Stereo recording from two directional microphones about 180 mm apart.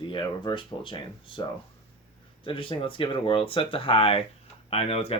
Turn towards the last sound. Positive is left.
turn(degrees=35)  # may be behind; listen again after turning